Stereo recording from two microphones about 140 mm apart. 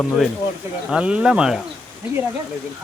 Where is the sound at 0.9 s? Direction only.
5° right (ahead or behind).